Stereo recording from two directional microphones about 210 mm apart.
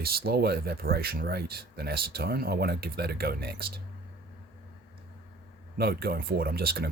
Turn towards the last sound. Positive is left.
turn(degrees=-45)  # may be behind; listen again after turning